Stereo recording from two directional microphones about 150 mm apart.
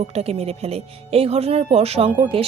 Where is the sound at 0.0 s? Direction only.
45° right (ahead or behind).